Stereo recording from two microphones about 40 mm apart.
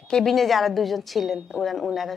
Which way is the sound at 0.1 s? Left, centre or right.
Centre.